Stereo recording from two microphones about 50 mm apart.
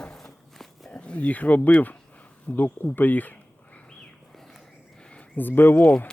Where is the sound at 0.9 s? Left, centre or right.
Left.